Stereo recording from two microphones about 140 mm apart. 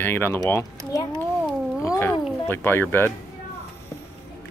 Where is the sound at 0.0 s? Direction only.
15° left (ahead or behind).